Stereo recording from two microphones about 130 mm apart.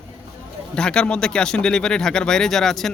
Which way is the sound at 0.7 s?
5° left (ahead or behind).